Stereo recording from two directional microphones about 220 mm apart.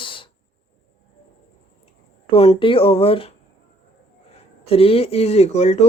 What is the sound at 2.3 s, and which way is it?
Speech, 25° left (ahead or behind).